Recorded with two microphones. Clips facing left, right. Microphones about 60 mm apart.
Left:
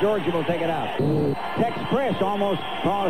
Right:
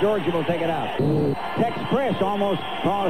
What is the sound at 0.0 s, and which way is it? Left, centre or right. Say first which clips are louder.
A man's voice: right 1 dB; centre.